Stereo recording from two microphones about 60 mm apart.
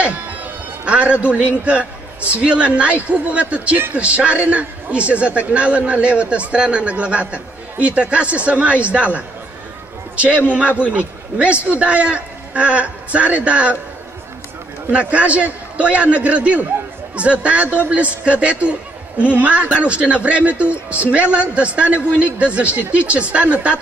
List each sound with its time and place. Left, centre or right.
0.0 s music: right
1.2 s a man's voice: right
14.9 s a man's voice: right